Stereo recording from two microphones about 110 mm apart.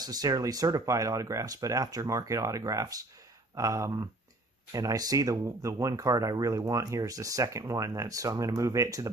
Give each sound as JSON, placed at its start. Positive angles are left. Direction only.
{"t": 0.0, "sound": "speech", "side_deg": -35}